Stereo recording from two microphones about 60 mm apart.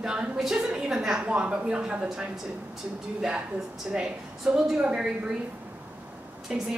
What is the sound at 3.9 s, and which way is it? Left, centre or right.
A woman's voice, centre.